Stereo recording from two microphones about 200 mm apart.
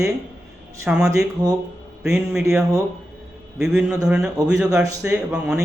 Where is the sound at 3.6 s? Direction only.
5° right (ahead or behind).